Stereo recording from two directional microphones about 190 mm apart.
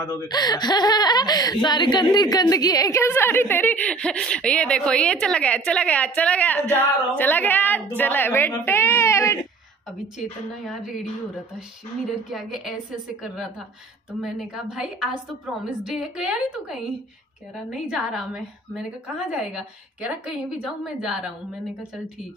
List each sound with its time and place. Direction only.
0.0 s speech: 20° left (ahead or behind)
10.1 s a woman's voice: centre (ahead or behind)
12.3 s a woman's voice: centre (ahead or behind)